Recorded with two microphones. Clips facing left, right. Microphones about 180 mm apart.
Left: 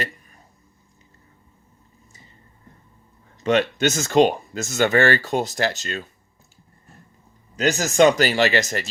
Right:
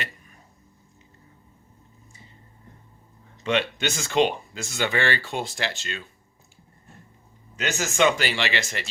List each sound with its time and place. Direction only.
3.4 s speech: 45° left (ahead or behind)
7.5 s speech: 40° left (ahead or behind)